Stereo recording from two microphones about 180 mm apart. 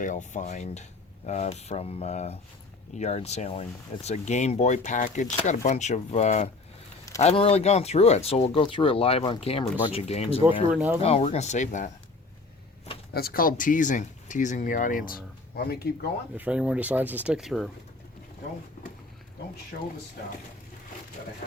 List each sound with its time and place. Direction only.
0.0 s speech: 45° left (ahead or behind)
10.7 s speech: 5° right (ahead or behind)
11.0 s speech: 35° left (ahead or behind)
13.1 s speech: 55° left (ahead or behind)
15.5 s speech: 60° left (ahead or behind)
16.4 s speech: 5° right (ahead or behind)